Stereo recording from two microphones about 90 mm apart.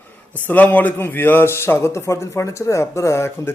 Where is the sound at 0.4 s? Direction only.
20° left (ahead or behind).